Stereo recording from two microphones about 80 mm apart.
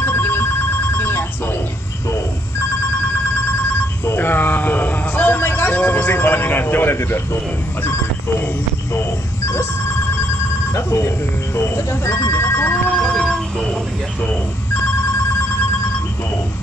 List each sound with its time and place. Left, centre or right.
0.0 s telephone bell ringing: left
4.0 s a sound: left
10.7 s speech: left
13.0 s telephone bell ringing: centre